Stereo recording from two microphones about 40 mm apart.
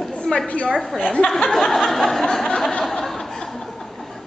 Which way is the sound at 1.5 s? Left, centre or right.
Centre.